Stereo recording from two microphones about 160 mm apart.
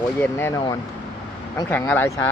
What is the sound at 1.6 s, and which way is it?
Speech, 10° left (ahead or behind).